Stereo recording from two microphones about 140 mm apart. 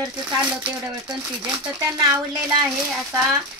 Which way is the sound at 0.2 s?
5° right (ahead or behind).